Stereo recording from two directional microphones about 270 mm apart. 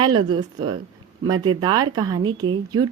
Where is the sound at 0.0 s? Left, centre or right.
Centre.